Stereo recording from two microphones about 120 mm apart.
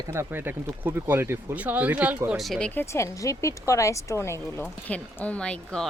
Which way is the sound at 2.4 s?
5° left (ahead or behind).